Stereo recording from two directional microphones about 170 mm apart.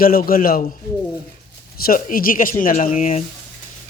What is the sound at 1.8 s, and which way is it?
A man's voice, 55° left (ahead or behind).